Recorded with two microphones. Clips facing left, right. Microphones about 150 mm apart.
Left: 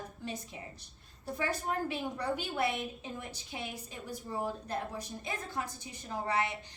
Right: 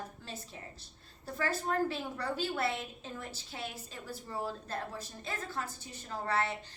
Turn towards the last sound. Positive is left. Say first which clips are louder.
# even
turn(degrees=15)  # may be behind; listen again after turning